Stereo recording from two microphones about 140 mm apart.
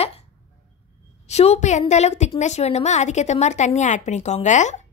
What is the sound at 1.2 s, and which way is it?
A woman's voice, 50° left (ahead or behind).